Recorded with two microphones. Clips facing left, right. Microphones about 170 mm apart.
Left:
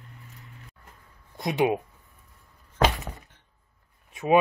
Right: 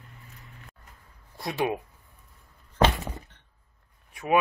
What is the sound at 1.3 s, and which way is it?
Speech, 20° left (ahead or behind).